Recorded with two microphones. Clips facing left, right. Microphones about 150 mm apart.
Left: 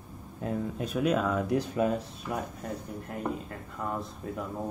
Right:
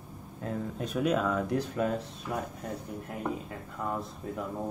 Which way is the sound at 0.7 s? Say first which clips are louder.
Even; 5° left (ahead or behind).